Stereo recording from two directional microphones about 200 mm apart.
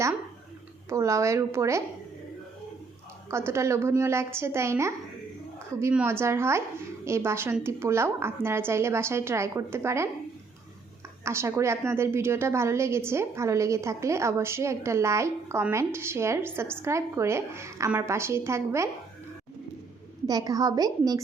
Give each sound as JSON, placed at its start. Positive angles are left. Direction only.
{"t": 0.9, "sound": "a woman's voice", "side_deg": -15}
{"t": 3.2, "sound": "a woman's voice", "side_deg": -15}
{"t": 11.3, "sound": "a woman's voice", "side_deg": -15}
{"t": 20.2, "sound": "a woman's voice", "side_deg": -20}